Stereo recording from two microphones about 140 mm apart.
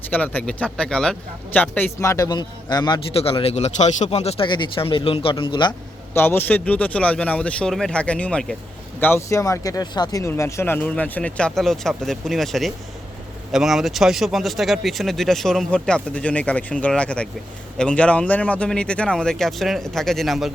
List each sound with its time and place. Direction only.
0.1 s a man's voice: 10° left (ahead or behind); by 3.0 s 30° left (ahead or behind)
3.1 s a man's voice: 40° left (ahead or behind)
4.4 s speech: 35° left (ahead or behind)
6.1 s speech: 15° left (ahead or behind)
9.0 s speech: 15° left (ahead or behind); by 20.5 s centre (ahead or behind)